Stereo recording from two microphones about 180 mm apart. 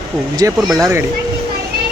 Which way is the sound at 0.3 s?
20° right (ahead or behind).